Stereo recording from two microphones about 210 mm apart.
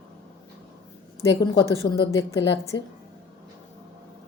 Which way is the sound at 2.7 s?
60° left (ahead or behind).